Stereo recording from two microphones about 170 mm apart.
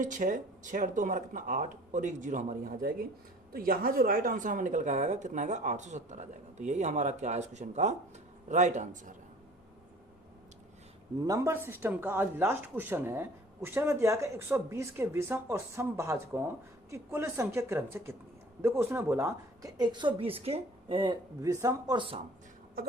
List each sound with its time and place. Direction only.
0.0 s speech: 50° right (ahead or behind)
11.2 s a woman's voice: 20° right (ahead or behind)
21.5 s a woman's voice: 20° right (ahead or behind)